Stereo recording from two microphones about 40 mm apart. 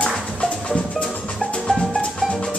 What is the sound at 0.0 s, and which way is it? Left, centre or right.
Music, left.